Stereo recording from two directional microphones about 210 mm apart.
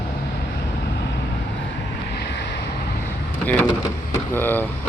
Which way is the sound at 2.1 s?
50° left (ahead or behind).